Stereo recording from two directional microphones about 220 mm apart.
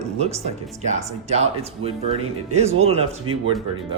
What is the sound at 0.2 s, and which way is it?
Speech, 30° right (ahead or behind).